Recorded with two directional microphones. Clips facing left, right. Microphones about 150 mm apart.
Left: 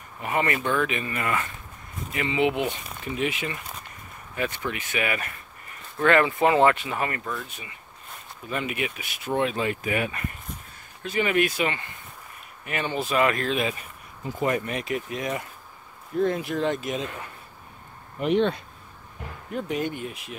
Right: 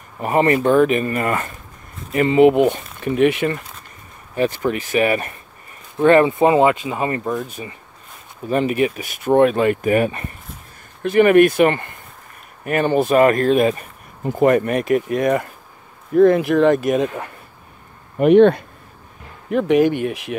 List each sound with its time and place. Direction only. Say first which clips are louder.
0.2 s speech: right 10 dB; 40° right (ahead or behind); by 3.6 s 55° right (ahead or behind)
4.4 s speech: right 10 dB; 40° right (ahead or behind)
5.9 s speech: right 8 dB; 20° right (ahead or behind)
7.2 s speech: right 10 dB; 40° right (ahead or behind)
11.0 s speech: right 12 dB; 55° right (ahead or behind)
16.2 s speech: right 12 dB; 70° right (ahead or behind)
19.5 s speech: right 13 dB; 80° right